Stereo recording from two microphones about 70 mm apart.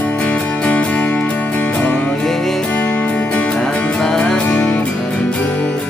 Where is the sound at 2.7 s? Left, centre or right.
Left.